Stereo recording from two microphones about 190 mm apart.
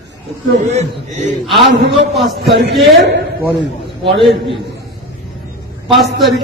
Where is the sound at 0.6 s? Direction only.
40° right (ahead or behind).